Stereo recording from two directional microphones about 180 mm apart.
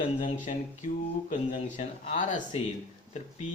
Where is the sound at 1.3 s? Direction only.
45° left (ahead or behind).